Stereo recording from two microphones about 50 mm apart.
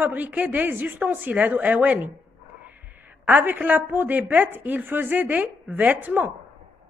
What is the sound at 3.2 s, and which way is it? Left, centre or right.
A woman's voice, right.